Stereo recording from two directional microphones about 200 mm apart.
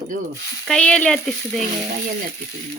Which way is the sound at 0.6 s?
5° left (ahead or behind).